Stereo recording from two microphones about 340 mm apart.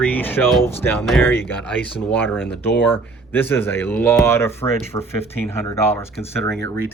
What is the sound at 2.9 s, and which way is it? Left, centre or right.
Speech, centre.